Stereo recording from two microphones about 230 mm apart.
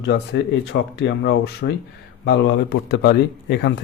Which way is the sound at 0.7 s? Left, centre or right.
Left.